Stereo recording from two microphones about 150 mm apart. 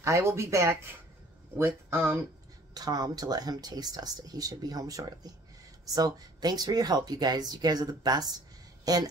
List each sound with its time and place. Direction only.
0.0 s speech: 20° right (ahead or behind)